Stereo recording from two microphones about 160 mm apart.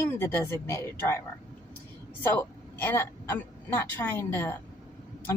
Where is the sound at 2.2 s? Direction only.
15° left (ahead or behind).